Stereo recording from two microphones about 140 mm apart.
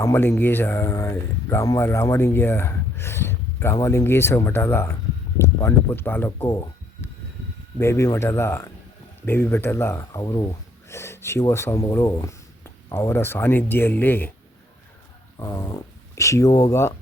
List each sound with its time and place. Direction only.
0.0 s speech: 20° left (ahead or behind)
7.8 s speech: 20° left (ahead or behind)
15.4 s speech: 20° left (ahead or behind)